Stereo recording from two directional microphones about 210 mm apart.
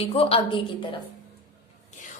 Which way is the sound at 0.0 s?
25° left (ahead or behind).